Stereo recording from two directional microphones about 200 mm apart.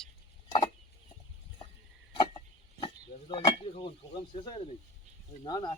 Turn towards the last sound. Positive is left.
turn(degrees=20)  # may be behind; listen again after turning